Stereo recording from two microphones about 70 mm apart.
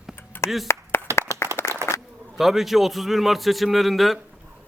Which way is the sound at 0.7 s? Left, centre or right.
Left.